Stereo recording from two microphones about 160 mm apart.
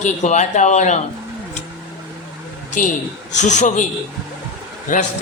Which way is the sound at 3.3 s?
50° left (ahead or behind).